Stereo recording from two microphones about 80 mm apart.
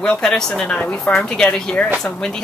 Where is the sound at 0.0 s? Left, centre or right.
Centre.